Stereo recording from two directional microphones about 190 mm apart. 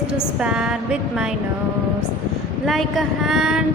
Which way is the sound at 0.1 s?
5° right (ahead or behind).